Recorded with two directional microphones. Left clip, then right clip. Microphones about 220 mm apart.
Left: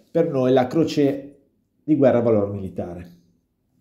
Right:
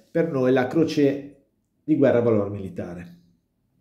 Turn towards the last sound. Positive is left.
turn(degrees=20)  # may be behind; listen again after turning